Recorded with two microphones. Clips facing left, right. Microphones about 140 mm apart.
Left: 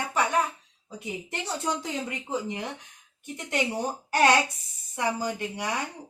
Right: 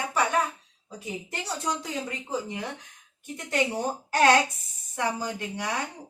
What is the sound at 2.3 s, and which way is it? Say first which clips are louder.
A woman's voice: left 1 dB; 20° left (ahead or behind).